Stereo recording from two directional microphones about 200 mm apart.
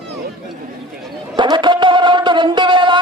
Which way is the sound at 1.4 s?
20° right (ahead or behind).